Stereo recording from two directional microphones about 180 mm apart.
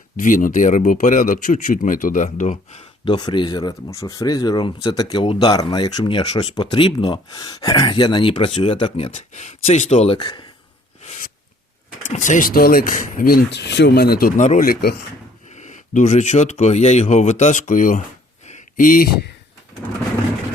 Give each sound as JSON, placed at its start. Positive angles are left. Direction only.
{"t": 0.2, "sound": "speech", "side_deg": 45}
{"t": 3.1, "sound": "speech", "side_deg": 25}
{"t": 12.0, "sound": "speech", "side_deg": 45}
{"t": 15.5, "sound": "speech", "side_deg": 45}
{"t": 18.4, "sound": "a sound", "side_deg": 45}